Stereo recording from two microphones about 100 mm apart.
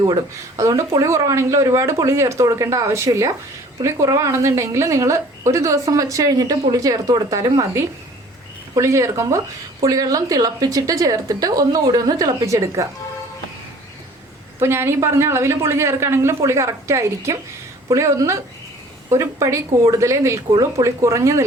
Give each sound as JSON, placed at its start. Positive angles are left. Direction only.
{"t": 0.5, "sound": "a woman's voice", "side_deg": -30}
{"t": 14.6, "sound": "a woman's voice", "side_deg": -25}